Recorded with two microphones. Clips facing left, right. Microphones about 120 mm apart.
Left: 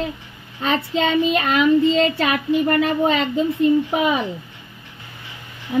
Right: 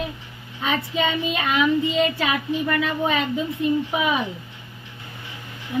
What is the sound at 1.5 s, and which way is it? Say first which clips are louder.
Speech: left 4 dB; 90° left.